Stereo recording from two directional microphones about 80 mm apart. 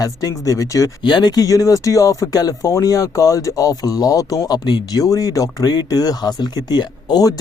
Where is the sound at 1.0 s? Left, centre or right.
Left.